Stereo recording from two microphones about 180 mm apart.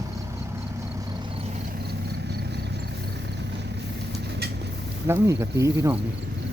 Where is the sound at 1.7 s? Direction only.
65° right (ahead or behind).